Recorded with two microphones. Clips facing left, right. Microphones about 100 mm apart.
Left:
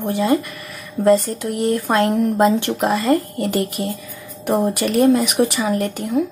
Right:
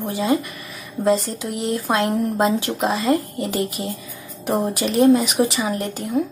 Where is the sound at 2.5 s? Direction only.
Centre (ahead or behind).